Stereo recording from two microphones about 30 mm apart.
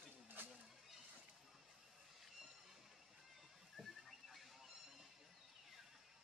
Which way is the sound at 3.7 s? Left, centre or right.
Centre.